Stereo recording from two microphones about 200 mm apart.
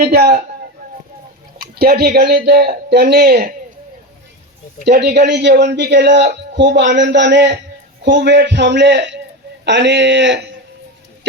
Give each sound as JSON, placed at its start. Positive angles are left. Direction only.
{"t": 0.1, "sound": "a man's voice", "side_deg": -50}
{"t": 1.8, "sound": "a man's voice", "side_deg": -50}
{"t": 4.9, "sound": "a man's voice", "side_deg": -55}